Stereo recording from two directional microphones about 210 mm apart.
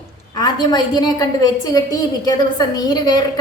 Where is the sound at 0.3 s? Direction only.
20° left (ahead or behind).